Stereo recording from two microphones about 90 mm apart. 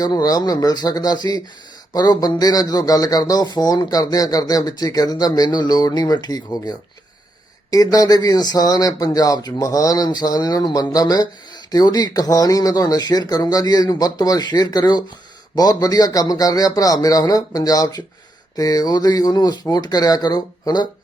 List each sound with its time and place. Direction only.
0.0 s speech: 45° left (ahead or behind)